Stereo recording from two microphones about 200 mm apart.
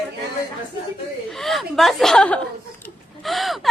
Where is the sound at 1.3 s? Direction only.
Centre (ahead or behind).